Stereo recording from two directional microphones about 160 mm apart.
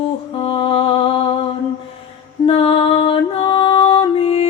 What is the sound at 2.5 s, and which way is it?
Music, 35° left (ahead or behind).